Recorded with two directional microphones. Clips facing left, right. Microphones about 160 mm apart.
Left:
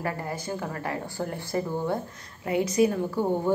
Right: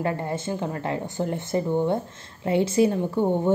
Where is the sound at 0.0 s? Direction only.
25° right (ahead or behind).